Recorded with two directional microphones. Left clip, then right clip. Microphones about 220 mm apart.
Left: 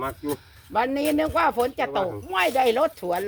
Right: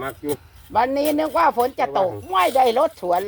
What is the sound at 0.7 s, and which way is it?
Speech, 20° left (ahead or behind).